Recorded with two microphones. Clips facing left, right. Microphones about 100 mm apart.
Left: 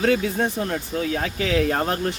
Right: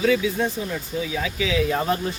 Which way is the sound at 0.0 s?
55° left (ahead or behind).